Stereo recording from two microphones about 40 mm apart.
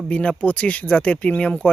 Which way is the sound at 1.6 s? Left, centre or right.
Left.